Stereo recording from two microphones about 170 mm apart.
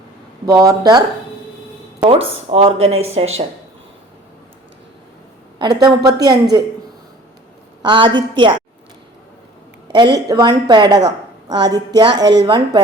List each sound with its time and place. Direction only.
0.4 s a woman's voice: 20° right (ahead or behind)
2.0 s speech: 35° right (ahead or behind)
5.5 s a woman's voice: 25° right (ahead or behind)
7.8 s a woman's voice: 30° right (ahead or behind)
10.2 s a woman's voice: 20° right (ahead or behind)